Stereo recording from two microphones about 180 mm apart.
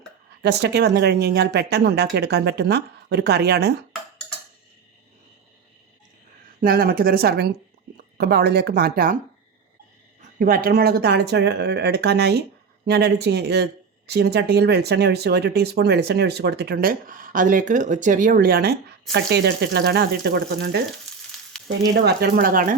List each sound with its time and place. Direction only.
0.3 s speech: 65° right (ahead or behind)
6.6 s speech: 55° right (ahead or behind)
10.3 s speech: 55° right (ahead or behind)
21.9 s speech: 65° right (ahead or behind)